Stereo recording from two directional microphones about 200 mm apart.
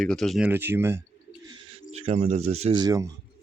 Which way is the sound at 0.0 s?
Centre (ahead or behind).